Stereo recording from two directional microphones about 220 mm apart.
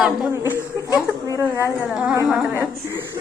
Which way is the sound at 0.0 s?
Centre (ahead or behind).